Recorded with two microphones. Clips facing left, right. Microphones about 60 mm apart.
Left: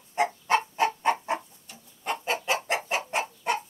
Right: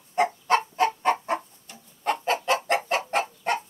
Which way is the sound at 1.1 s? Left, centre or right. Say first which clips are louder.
Right 2 dB; right.